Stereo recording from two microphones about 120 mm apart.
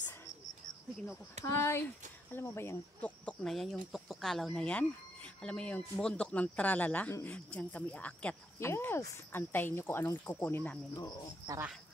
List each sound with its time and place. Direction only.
1.4 s speech: 20° left (ahead or behind)
3.3 s speech: centre (ahead or behind)
8.5 s speech: 20° left (ahead or behind)